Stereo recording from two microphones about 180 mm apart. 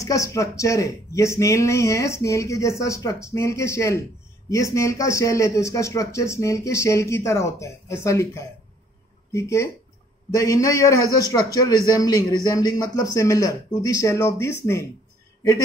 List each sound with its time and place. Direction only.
0.0 s a man's voice: 20° left (ahead or behind)